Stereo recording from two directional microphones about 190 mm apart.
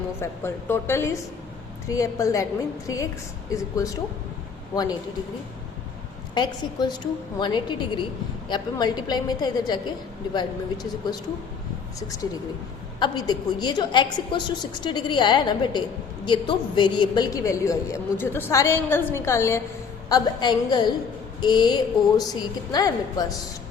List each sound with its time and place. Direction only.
0.2 s a woman's voice: 10° left (ahead or behind)
6.3 s a woman's voice: 20° left (ahead or behind)
13.0 s a woman's voice: 20° left (ahead or behind)